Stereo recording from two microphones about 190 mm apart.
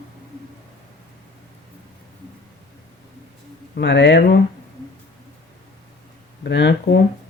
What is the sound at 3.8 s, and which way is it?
Speech, 65° left (ahead or behind).